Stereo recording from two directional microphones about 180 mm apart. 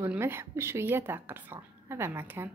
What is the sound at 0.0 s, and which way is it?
Speech, 15° right (ahead or behind).